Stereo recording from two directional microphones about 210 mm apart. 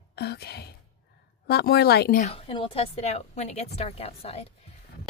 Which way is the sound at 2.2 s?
25° left (ahead or behind).